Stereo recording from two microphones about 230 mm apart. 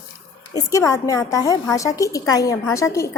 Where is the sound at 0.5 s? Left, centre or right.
Centre.